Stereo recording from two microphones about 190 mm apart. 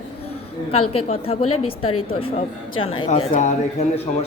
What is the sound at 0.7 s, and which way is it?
A woman's voice, 30° left (ahead or behind).